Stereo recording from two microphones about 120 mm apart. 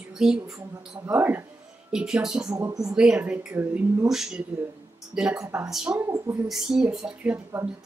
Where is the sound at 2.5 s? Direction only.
30° right (ahead or behind).